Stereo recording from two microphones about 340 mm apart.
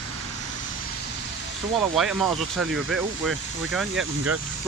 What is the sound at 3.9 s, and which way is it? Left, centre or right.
Speech, right.